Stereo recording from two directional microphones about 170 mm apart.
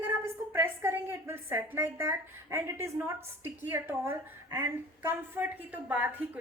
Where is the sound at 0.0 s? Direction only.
10° right (ahead or behind).